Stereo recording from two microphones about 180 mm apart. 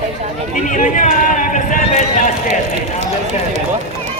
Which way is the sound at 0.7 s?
45° left (ahead or behind).